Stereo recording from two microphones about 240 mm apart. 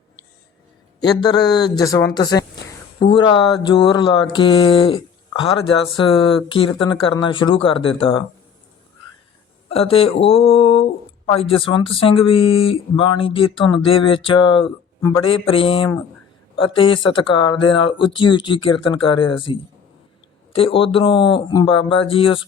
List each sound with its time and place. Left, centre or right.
0.9 s speech: centre
9.6 s speech: left